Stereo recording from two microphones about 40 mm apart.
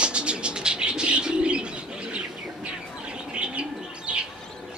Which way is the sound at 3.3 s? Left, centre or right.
Right.